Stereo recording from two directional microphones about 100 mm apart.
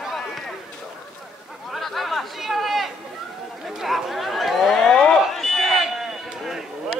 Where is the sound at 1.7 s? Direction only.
Centre (ahead or behind).